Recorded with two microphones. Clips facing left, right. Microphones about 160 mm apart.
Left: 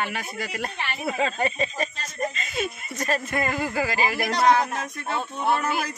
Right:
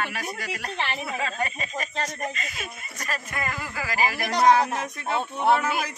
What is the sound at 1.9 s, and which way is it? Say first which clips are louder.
Speech: right 9 dB; 70° right (ahead or behind).